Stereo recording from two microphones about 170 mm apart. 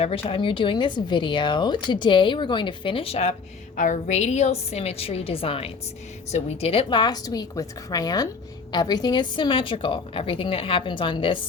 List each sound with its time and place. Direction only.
0.0 s a woman's voice: 30° left (ahead or behind)
3.8 s a woman's voice: 50° left (ahead or behind); by 11.4 s 30° left (ahead or behind)